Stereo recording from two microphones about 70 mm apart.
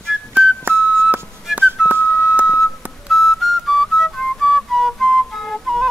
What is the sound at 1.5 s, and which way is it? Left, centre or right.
Whistle, right.